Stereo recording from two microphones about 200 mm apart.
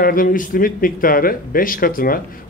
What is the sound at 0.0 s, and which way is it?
Speech, 45° left (ahead or behind).